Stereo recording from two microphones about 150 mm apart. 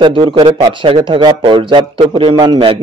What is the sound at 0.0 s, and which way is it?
Speech, 35° right (ahead or behind).